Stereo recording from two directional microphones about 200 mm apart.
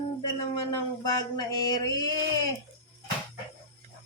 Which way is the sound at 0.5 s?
20° left (ahead or behind).